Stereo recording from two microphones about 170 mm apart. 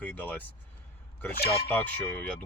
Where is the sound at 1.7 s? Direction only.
10° left (ahead or behind).